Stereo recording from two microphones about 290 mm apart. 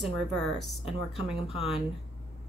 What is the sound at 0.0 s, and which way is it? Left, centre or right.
Speech, centre.